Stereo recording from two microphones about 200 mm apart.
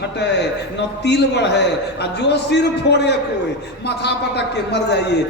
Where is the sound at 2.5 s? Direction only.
55° left (ahead or behind).